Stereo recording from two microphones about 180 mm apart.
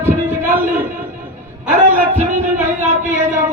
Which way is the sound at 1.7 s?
45° right (ahead or behind).